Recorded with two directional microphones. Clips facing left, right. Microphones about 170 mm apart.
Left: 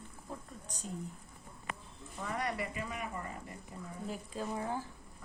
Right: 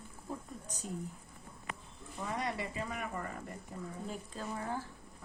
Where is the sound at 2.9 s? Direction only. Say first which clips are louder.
Right 1 dB; 50° right (ahead or behind).